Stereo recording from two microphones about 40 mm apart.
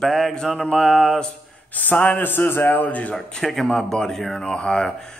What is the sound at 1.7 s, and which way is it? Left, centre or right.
Speech, left.